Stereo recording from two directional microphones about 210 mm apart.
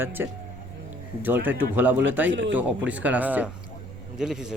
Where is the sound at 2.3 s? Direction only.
60° right (ahead or behind).